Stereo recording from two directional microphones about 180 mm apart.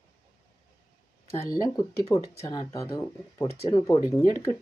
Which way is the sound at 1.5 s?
20° left (ahead or behind).